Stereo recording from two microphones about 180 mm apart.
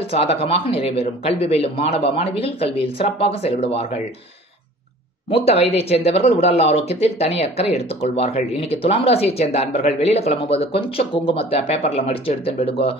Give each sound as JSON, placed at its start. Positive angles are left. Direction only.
{"t": 0.1, "sound": "speech", "side_deg": 35}
{"t": 5.3, "sound": "speech", "side_deg": 35}